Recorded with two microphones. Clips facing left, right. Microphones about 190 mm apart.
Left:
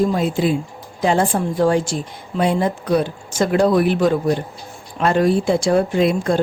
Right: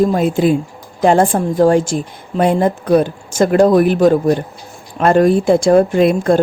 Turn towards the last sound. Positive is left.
turn(degrees=-55)  # may be behind; listen again after turning